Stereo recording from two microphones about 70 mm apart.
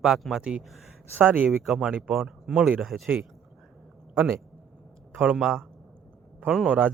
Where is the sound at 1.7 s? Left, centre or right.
Centre.